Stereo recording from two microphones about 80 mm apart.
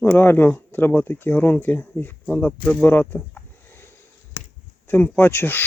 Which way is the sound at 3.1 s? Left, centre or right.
Left.